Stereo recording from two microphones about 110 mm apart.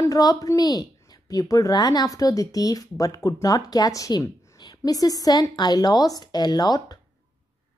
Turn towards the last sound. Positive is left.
turn(degrees=35)  # may be behind; listen again after turning